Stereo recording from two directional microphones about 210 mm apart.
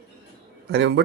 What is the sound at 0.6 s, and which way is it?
Speech, 55° right (ahead or behind).